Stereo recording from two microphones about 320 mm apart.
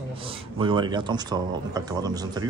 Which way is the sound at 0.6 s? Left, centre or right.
Centre.